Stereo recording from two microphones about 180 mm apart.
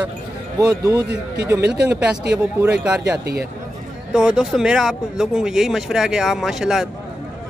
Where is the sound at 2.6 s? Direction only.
10° right (ahead or behind).